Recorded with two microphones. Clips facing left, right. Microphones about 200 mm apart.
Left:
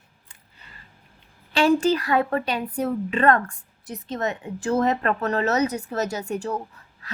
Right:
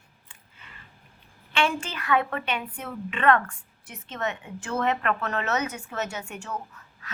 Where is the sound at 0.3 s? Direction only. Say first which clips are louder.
Even; 35° left (ahead or behind).